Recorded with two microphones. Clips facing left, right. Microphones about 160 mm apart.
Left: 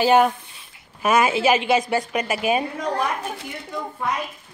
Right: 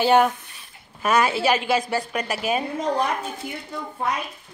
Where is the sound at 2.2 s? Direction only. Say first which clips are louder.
Left 3 dB; 5° left (ahead or behind).